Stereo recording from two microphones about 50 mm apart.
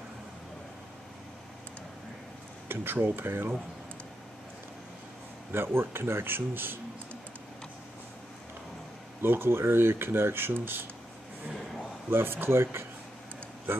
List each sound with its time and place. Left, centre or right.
2.7 s speech: right
5.5 s speech: right
9.2 s speech: right
12.1 s speech: right